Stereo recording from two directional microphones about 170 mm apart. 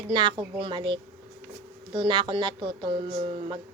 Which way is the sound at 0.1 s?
25° right (ahead or behind).